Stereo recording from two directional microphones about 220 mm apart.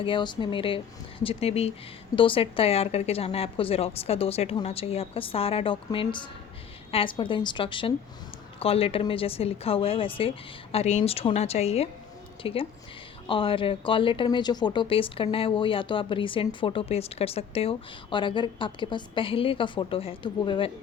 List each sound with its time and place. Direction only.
0.0 s speech: 20° left (ahead or behind)